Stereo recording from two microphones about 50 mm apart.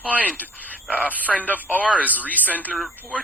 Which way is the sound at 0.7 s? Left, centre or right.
Right.